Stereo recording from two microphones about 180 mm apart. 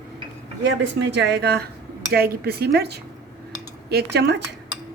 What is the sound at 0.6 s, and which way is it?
Speech, 80° right.